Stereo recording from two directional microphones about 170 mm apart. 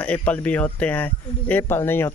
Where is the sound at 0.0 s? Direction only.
10° left (ahead or behind).